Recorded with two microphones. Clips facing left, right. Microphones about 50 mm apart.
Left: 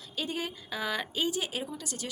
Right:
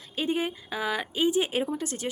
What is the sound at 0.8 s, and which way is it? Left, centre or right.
Speech, centre.